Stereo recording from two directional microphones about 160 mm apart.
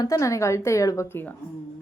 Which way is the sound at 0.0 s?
20° left (ahead or behind).